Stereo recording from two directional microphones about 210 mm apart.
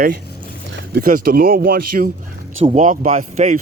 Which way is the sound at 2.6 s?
35° right (ahead or behind).